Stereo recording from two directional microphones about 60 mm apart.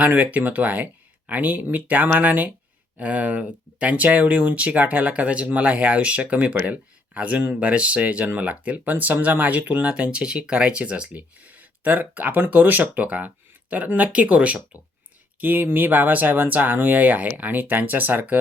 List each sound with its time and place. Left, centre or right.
0.0 s speech: right
9.9 s speech: centre